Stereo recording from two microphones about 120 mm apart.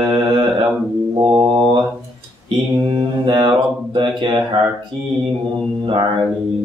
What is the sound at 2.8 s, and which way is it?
Mantra, 45° right (ahead or behind).